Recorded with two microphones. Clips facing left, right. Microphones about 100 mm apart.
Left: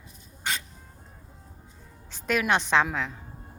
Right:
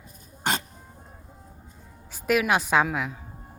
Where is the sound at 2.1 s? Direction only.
5° right (ahead or behind).